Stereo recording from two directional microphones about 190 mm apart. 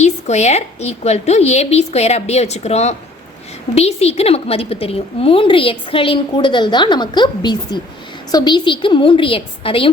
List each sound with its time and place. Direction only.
0.0 s a woman's voice: 35° left (ahead or behind)